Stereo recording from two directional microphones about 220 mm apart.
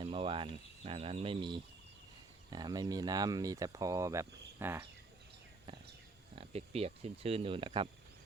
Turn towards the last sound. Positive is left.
turn(degrees=-25)  # may be behind; listen again after turning